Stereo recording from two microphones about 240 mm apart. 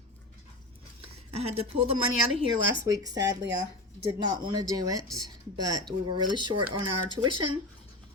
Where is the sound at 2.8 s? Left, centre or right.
Centre.